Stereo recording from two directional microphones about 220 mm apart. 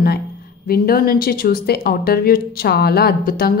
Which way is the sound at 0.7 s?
45° left (ahead or behind).